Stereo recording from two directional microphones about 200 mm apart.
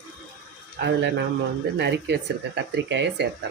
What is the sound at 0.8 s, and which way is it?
Speech, 60° right (ahead or behind).